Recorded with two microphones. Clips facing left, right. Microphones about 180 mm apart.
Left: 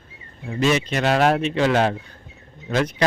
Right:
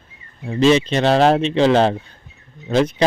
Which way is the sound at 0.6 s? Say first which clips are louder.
Right 6 dB; 25° right (ahead or behind).